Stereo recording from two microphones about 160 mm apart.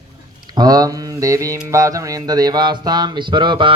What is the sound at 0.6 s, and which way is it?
Speech, 25° right (ahead or behind).